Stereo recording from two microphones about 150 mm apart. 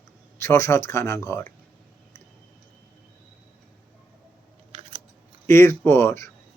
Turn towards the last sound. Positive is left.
turn(degrees=20)  # may be behind; listen again after turning